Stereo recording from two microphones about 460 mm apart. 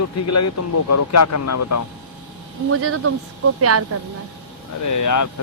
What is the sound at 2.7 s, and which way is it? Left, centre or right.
Speech, right.